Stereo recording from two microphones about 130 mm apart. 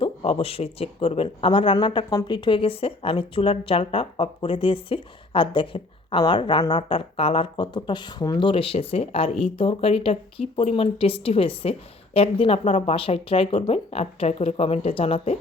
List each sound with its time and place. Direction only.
0.0 s speech: 45° left (ahead or behind)